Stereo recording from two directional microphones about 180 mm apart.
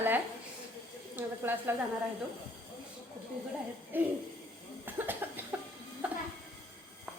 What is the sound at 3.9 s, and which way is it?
Speech, 10° right (ahead or behind).